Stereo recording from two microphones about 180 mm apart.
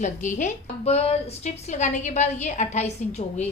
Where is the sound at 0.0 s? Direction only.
45° left (ahead or behind).